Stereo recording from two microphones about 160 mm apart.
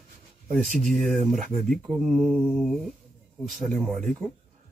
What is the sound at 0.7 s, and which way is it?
Speech, 50° right (ahead or behind).